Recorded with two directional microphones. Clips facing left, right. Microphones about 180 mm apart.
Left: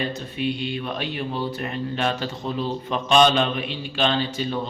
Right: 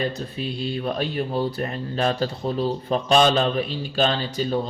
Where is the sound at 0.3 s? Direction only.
35° right (ahead or behind).